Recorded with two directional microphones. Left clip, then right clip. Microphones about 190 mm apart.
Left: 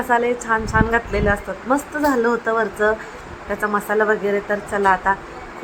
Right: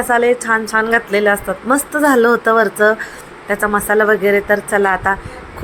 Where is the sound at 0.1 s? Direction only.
20° right (ahead or behind).